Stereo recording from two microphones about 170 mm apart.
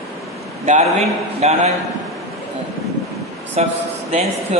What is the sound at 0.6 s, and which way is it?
A man's voice, 40° right (ahead or behind).